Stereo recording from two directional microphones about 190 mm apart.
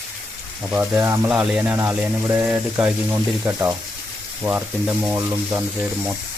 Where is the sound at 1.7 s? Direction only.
15° right (ahead or behind).